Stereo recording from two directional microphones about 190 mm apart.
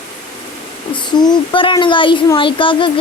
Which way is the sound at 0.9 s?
25° left (ahead or behind).